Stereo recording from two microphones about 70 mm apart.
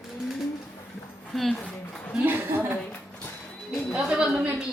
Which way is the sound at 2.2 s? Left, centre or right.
Right.